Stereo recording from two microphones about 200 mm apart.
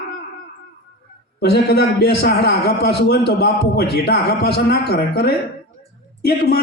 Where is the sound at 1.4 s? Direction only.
55° left (ahead or behind).